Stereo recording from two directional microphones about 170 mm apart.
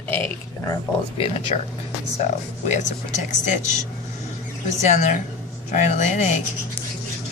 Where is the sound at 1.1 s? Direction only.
35° left (ahead or behind).